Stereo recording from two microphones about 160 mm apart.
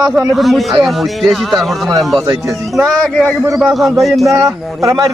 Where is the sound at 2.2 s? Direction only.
20° right (ahead or behind).